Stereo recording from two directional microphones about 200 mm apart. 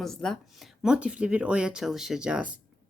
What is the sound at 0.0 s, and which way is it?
Speech, centre (ahead or behind).